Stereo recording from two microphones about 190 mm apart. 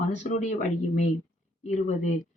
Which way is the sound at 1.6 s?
40° left (ahead or behind).